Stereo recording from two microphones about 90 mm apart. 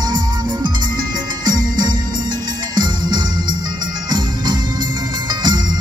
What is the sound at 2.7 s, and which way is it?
Organ, 50° right (ahead or behind).